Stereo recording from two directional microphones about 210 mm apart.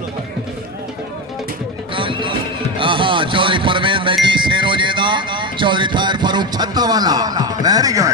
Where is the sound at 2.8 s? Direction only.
25° right (ahead or behind).